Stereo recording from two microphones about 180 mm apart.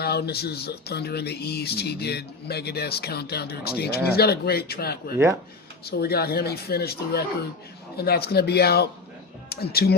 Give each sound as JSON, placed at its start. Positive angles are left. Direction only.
{"t": 0.0, "sound": "speech", "side_deg": 60}
{"t": 5.1, "sound": "speech", "side_deg": -15}
{"t": 5.9, "sound": "speech", "side_deg": 60}